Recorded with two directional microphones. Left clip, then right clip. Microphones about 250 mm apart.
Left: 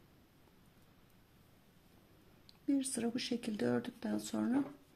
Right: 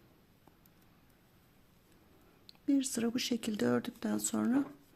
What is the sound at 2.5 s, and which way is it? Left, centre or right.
Speech, centre.